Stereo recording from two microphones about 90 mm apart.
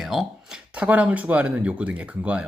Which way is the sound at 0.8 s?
15° right (ahead or behind).